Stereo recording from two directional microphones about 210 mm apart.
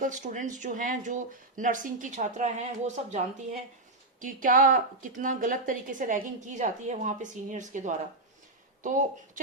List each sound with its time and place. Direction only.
0.0 s a woman's voice: 35° right (ahead or behind)